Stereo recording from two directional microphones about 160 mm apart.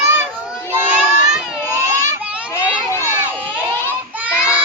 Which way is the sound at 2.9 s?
15° left (ahead or behind).